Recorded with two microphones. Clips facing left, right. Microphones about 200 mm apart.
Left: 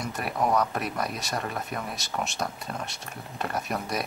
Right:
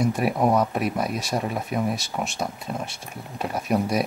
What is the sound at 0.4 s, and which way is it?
Speech, 20° right (ahead or behind).